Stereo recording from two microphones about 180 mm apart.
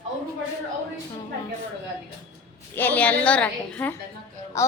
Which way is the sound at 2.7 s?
10° left (ahead or behind).